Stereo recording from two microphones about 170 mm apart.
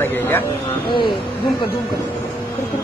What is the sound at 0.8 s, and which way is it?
Speech, 30° left (ahead or behind).